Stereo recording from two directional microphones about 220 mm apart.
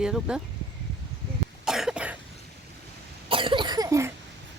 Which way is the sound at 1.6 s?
Centre (ahead or behind).